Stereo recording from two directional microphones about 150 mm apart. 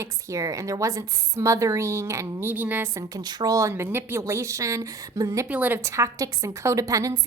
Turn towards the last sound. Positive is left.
turn(degrees=-20)  # may be behind; listen again after turning